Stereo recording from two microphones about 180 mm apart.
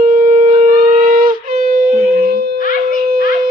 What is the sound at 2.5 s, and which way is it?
Music, 50° left (ahead or behind).